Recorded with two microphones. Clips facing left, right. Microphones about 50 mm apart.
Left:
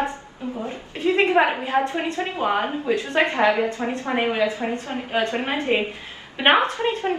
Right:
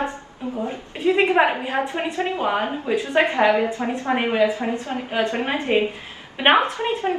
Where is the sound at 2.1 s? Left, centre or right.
Right.